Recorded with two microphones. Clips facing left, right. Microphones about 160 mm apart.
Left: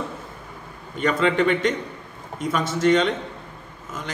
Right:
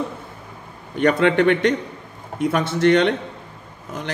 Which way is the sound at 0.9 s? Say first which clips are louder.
Right 4 dB; 65° right (ahead or behind).